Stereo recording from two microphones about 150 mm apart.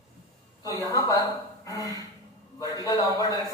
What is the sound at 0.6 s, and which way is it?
Speech, 25° left (ahead or behind).